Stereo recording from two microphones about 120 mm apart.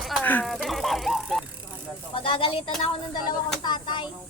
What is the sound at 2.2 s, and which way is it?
Speech, 50° left (ahead or behind).